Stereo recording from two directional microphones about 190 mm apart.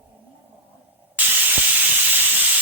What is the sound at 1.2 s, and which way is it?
Spray, 10° right (ahead or behind).